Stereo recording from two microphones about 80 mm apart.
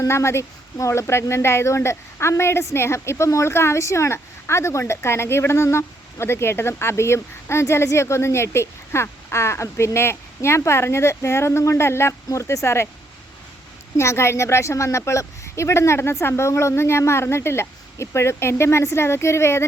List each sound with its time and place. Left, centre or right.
0.0 s speech: left
13.9 s speech: left